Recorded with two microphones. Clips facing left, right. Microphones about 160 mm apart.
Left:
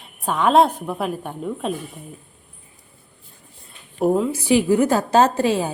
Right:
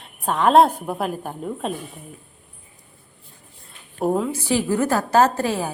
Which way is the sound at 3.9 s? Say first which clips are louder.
Left 3 dB; 5° left (ahead or behind).